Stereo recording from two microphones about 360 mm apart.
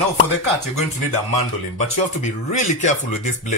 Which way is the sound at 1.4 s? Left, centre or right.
Centre.